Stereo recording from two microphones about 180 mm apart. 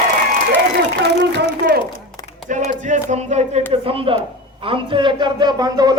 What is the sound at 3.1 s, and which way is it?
A man's voice, 40° right (ahead or behind).